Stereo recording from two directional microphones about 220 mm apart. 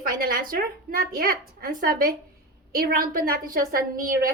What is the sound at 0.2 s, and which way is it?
A woman's voice, 40° right (ahead or behind).